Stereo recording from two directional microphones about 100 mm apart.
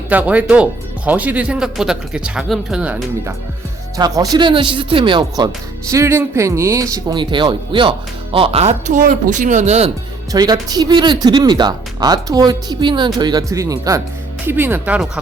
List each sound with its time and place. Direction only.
0.1 s speech: 15° right (ahead or behind)
3.9 s speech: 40° right (ahead or behind); by 5.5 s 55° right (ahead or behind)
5.9 s speech: 30° right (ahead or behind)
7.1 s speech: 50° right (ahead or behind); by 8.7 s 80° right
9.6 s speech: 90° right
10.3 s speech: 40° right (ahead or behind)
14.4 s speech: 20° right (ahead or behind)